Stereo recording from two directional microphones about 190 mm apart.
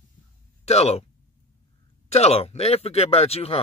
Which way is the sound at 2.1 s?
35° left (ahead or behind).